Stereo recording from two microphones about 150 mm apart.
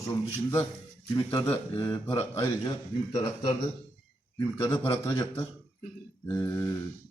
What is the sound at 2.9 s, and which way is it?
Speech, 40° left (ahead or behind).